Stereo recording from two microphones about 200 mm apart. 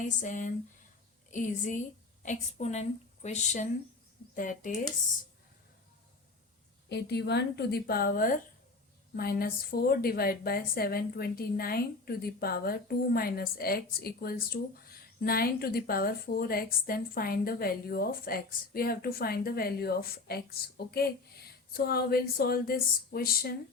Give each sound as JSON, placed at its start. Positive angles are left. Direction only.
{"t": 0.0, "sound": "a woman's voice", "side_deg": 40}
{"t": 6.8, "sound": "a woman's voice", "side_deg": 55}